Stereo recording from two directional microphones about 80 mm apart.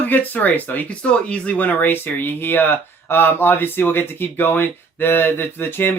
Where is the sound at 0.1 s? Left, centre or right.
Left.